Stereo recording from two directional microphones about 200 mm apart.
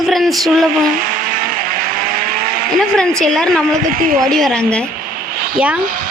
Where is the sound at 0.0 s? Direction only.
Centre (ahead or behind).